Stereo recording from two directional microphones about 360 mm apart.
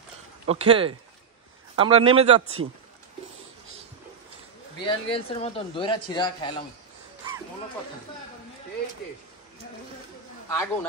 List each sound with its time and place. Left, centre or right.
0.5 s a man's voice: centre
4.8 s speech: centre
10.5 s speech: centre